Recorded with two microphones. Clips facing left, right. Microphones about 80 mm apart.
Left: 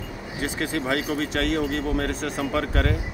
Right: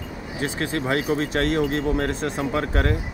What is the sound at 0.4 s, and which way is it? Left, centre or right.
Speech, right.